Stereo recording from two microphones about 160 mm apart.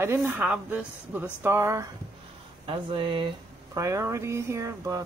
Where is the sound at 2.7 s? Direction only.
35° right (ahead or behind); by 5.0 s 20° right (ahead or behind).